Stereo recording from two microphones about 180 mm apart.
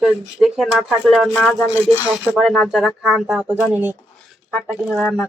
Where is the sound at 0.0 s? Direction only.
5° right (ahead or behind).